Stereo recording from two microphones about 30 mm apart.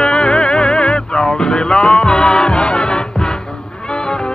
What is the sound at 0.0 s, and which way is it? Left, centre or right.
Music, left.